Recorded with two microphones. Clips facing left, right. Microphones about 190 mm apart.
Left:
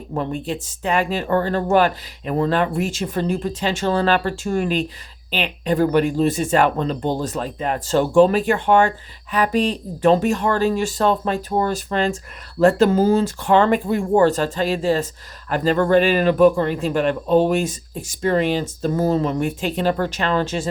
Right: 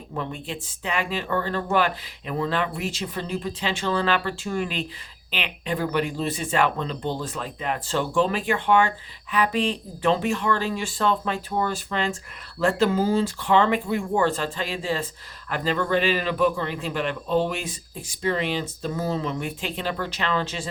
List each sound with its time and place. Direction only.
0.1 s speech: 40° left (ahead or behind)